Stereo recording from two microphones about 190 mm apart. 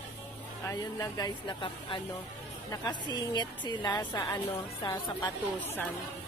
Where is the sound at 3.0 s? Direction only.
20° left (ahead or behind).